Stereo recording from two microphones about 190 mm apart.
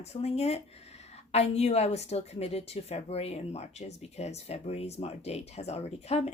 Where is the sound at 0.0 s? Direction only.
35° left (ahead or behind).